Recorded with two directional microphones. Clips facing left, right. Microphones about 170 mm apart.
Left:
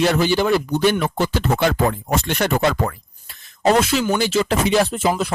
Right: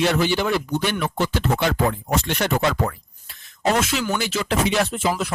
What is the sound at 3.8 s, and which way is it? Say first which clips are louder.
Speech: left 5 dB; 35° left (ahead or behind).